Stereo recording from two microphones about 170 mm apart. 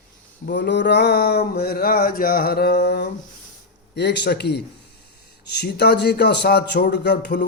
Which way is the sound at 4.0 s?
80° left.